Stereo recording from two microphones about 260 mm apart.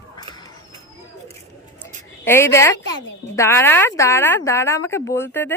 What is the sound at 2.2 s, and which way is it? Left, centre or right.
A child's voice, centre.